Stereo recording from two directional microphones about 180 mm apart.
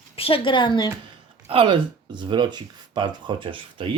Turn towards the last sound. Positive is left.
turn(degrees=-30)  # may be behind; listen again after turning